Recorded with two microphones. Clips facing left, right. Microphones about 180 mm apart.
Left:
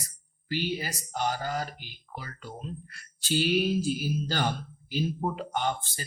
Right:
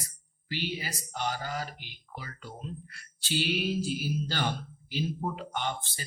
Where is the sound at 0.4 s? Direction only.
45° left (ahead or behind).